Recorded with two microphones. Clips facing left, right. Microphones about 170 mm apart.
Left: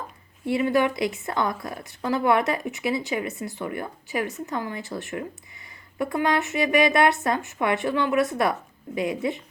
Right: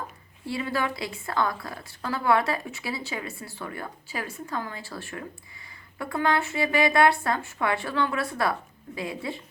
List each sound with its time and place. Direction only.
0.4 s a woman's voice: 20° left (ahead or behind)